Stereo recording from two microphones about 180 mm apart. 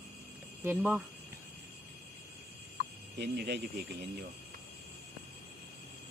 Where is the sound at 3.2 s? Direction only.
65° right (ahead or behind).